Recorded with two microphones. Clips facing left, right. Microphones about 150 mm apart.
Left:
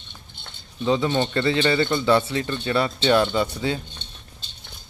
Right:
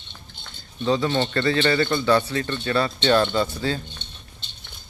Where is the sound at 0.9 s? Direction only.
15° left (ahead or behind).